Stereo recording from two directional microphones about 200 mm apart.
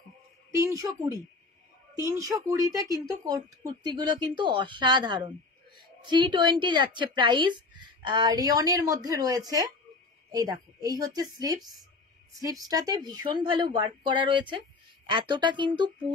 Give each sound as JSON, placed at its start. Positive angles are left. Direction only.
{"t": 0.5, "sound": "a woman's voice", "side_deg": -15}